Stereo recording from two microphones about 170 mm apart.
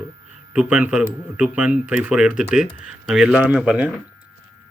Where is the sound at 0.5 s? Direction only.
5° right (ahead or behind).